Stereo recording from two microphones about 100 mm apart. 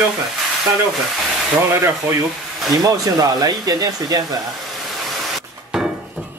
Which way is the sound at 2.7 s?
40° right (ahead or behind).